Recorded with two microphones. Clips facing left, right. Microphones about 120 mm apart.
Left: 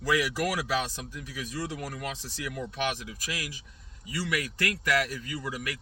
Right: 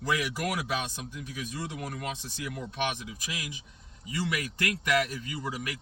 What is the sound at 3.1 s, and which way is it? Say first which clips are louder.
Speech: left 1 dB; 20° right (ahead or behind).